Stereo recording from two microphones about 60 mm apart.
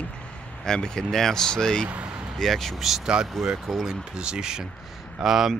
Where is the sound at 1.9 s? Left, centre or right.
Right.